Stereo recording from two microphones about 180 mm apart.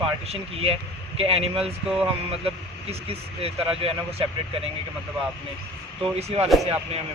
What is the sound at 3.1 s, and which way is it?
Speech, 30° right (ahead or behind).